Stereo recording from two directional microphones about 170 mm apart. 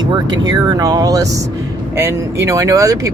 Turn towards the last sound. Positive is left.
turn(degrees=-20)  # may be behind; listen again after turning